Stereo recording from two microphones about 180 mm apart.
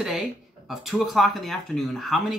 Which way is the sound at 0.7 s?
Centre (ahead or behind).